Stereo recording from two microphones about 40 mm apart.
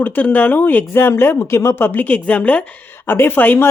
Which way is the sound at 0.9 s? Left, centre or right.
Left.